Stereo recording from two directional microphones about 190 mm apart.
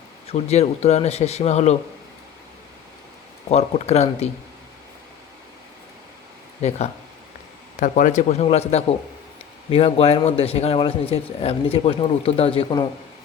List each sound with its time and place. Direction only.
0.3 s a man's voice: 35° left (ahead or behind)
3.5 s a man's voice: 35° left (ahead or behind)
6.6 s a man's voice: 35° left (ahead or behind)